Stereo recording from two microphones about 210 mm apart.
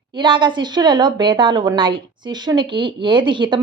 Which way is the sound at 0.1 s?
20° right (ahead or behind).